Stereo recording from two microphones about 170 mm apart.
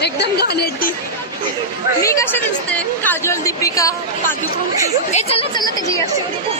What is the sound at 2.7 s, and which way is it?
Speech, 10° left (ahead or behind).